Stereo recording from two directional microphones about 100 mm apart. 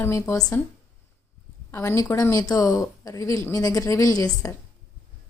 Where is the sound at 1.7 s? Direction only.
30° left (ahead or behind).